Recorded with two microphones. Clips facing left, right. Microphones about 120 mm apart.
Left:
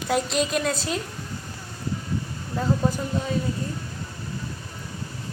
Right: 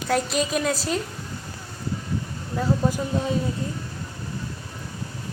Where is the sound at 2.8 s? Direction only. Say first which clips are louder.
Right 1 dB; centre (ahead or behind).